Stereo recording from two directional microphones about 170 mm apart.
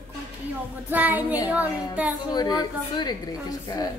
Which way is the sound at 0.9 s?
10° right (ahead or behind).